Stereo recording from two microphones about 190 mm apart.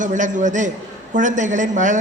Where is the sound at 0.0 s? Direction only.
40° right (ahead or behind).